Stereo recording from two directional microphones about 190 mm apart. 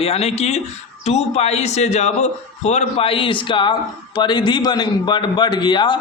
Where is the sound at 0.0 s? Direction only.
35° left (ahead or behind).